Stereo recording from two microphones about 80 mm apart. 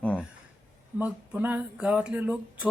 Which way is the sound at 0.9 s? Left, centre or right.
Centre.